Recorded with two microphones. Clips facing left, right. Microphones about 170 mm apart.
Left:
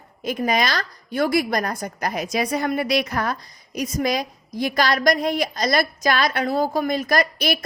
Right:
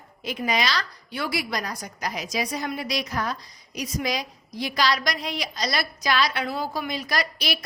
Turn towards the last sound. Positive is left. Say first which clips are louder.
# left 7 dB
turn(degrees=50)  # may be behind; listen again after turning